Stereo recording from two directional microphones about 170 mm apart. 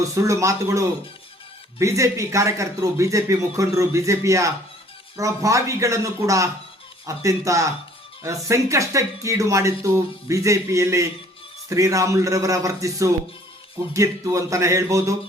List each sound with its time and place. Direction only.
0.0 s a man's voice: 20° right (ahead or behind)